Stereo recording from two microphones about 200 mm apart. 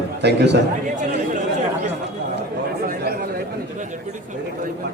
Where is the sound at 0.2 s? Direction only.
55° right (ahead or behind).